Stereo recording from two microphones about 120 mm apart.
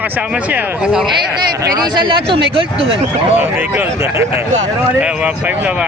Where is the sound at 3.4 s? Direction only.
15° right (ahead or behind).